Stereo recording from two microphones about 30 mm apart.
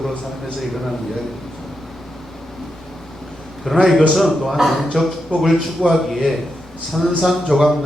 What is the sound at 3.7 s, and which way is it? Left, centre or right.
Speech, centre.